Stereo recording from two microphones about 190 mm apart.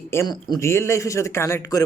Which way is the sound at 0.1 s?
15° left (ahead or behind).